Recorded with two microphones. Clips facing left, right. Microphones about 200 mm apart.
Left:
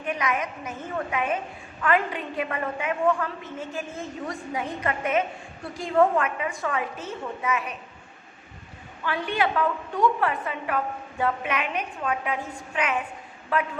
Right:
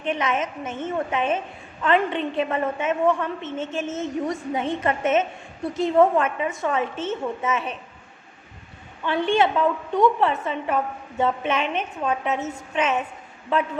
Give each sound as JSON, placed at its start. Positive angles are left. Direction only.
{"t": 0.0, "sound": "a woman's voice", "side_deg": -25}
{"t": 9.0, "sound": "a woman's voice", "side_deg": -25}